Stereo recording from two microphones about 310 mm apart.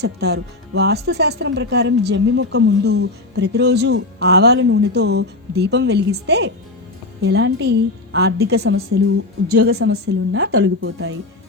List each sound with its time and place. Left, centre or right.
0.0 s speech: right